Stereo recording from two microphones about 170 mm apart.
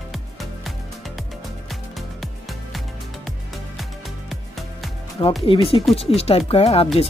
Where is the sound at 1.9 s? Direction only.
Centre (ahead or behind).